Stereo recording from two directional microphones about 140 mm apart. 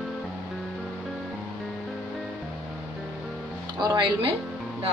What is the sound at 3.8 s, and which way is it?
Speech, 35° right (ahead or behind).